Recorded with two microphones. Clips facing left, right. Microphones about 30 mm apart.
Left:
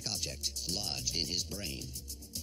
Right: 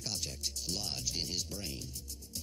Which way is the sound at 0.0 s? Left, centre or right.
Left.